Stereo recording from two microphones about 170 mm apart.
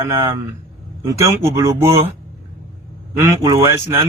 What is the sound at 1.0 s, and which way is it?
Speech, 20° right (ahead or behind).